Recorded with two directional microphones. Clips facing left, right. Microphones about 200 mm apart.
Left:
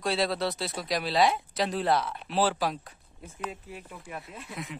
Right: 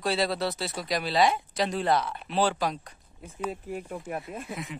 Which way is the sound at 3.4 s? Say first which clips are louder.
Right 6 dB; 45° right (ahead or behind).